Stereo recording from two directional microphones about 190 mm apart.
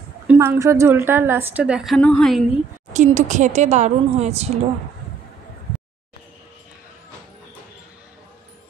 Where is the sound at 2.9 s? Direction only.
40° right (ahead or behind).